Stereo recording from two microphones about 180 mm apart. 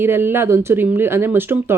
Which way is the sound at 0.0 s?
10° right (ahead or behind).